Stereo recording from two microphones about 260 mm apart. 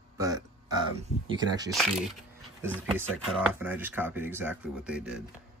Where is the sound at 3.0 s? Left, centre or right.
Centre.